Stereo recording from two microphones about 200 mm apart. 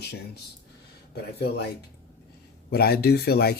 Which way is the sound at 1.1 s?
55° left (ahead or behind).